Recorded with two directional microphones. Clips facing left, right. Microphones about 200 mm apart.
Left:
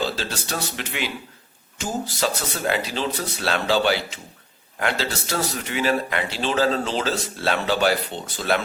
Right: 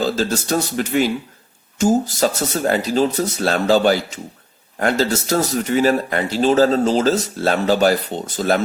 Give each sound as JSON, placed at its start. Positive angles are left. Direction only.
{"t": 0.0, "sound": "speech", "side_deg": -45}